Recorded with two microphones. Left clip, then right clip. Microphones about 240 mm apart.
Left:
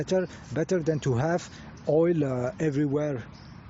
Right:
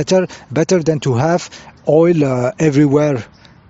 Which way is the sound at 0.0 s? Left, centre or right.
Right.